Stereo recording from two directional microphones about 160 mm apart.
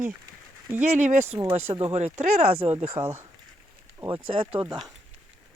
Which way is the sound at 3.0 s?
15° right (ahead or behind).